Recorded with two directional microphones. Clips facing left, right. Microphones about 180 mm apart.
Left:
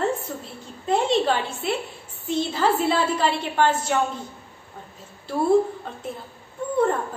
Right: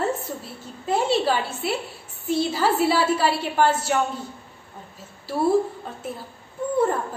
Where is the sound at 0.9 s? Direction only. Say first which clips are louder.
Left 1 dB; 5° right (ahead or behind).